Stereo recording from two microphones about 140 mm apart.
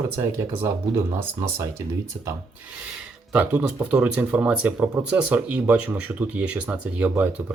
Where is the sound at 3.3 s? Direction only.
10° right (ahead or behind).